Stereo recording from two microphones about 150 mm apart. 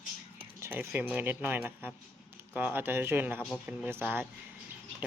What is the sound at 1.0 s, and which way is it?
Rub, 10° right (ahead or behind).